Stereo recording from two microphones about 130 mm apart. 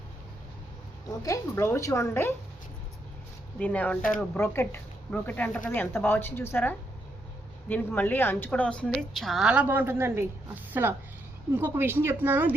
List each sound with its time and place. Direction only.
1.2 s a woman's voice: 25° left (ahead or behind)
3.6 s a woman's voice: 10° left (ahead or behind); by 12.5 s 15° right (ahead or behind)